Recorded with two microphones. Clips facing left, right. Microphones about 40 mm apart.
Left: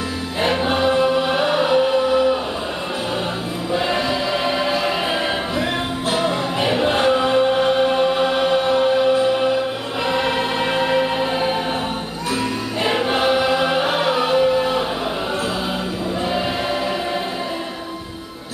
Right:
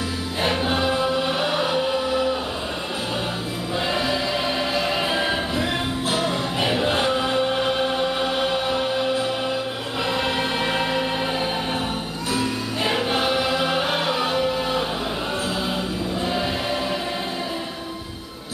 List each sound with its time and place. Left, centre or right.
0.4 s choir: centre
3.7 s choir: centre
7.9 s music: centre